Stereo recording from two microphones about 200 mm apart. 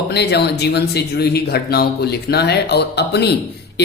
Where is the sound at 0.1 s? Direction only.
55° left (ahead or behind).